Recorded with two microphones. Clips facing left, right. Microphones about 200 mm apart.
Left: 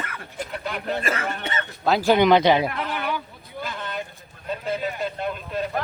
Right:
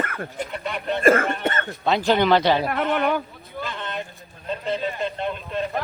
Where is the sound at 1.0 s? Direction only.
50° right (ahead or behind).